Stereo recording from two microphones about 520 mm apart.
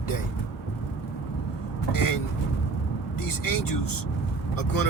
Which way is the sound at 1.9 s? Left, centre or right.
Left.